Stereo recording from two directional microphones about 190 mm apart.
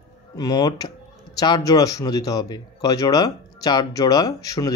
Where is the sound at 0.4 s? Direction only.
20° left (ahead or behind).